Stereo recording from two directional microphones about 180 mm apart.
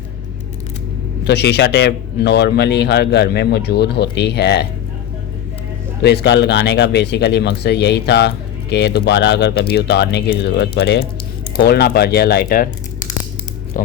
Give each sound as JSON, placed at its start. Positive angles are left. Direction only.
{"t": 1.2, "sound": "a man's voice", "side_deg": 70}
{"t": 6.0, "sound": "a man's voice", "side_deg": 65}
{"t": 13.7, "sound": "speech", "side_deg": 50}